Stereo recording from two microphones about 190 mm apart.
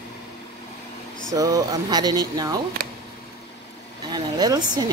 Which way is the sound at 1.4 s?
20° right (ahead or behind).